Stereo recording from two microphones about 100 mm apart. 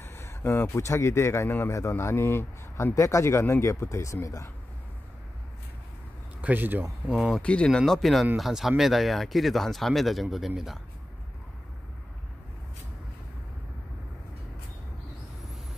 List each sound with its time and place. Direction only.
0.0 s a man's voice: 25° left (ahead or behind)
6.4 s speech: 20° right (ahead or behind)
7.1 s speech: 5° right (ahead or behind)
7.4 s speech: 10° left (ahead or behind)